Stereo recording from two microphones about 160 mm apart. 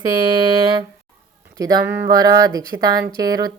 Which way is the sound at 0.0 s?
25° right (ahead or behind).